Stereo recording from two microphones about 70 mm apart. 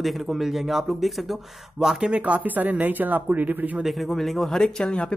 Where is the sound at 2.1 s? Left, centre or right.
Right.